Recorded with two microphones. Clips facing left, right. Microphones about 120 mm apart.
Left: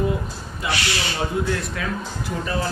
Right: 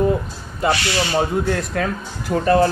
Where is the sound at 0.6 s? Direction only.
45° right (ahead or behind).